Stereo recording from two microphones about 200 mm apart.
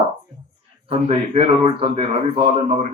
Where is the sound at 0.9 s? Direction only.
30° right (ahead or behind).